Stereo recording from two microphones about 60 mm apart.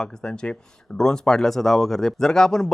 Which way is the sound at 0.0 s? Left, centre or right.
Centre.